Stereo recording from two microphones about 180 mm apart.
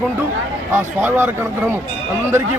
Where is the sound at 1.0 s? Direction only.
10° right (ahead or behind).